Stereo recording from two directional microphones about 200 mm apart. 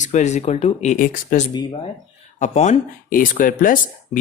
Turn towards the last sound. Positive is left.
turn(degrees=45)  # may be behind; listen again after turning